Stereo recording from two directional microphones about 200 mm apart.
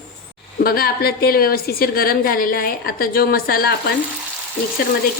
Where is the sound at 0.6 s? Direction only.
50° left (ahead or behind).